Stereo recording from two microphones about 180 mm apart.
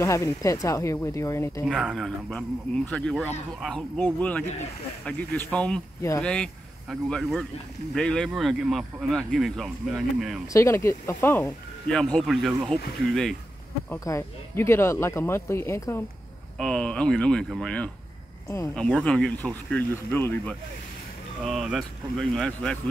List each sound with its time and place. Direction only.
0.0 s speech: 15° left (ahead or behind)
1.7 s speech: centre (ahead or behind)
10.5 s speech: 15° left (ahead or behind)
13.8 s speech: 15° left (ahead or behind)
16.5 s speech: 5° left (ahead or behind)
21.5 s speech: centre (ahead or behind)